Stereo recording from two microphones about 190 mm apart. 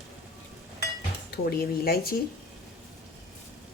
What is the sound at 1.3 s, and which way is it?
Speech, 55° left (ahead or behind).